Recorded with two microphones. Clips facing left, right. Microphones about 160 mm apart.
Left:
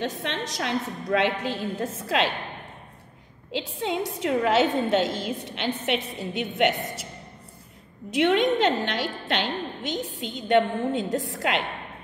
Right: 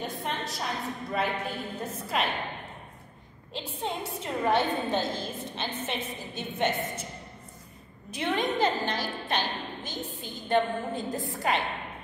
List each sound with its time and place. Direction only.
0.0 s a woman's voice: 90° left
3.5 s a woman's voice: 90° left
5.9 s a woman's voice: 75° left (ahead or behind)
8.1 s a woman's voice: 75° left (ahead or behind)